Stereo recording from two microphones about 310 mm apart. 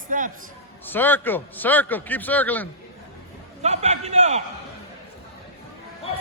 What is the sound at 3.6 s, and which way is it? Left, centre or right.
Speech, right.